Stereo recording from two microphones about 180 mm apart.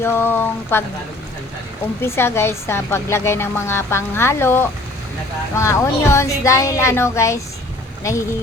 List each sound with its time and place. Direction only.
0.0 s a woman's voice: 15° left (ahead or behind)
2.0 s a woman's voice: 15° left (ahead or behind)